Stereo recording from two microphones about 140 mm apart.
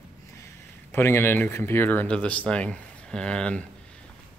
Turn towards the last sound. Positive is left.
turn(degrees=5)  # may be behind; listen again after turning